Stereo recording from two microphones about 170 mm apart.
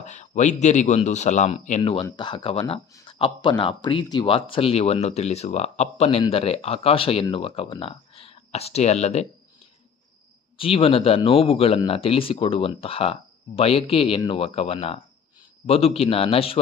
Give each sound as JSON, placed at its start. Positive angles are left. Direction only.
{"t": 0.0, "sound": "speech", "side_deg": 45}
{"t": 1.8, "sound": "speech", "side_deg": 30}
{"t": 10.6, "sound": "speech", "side_deg": 35}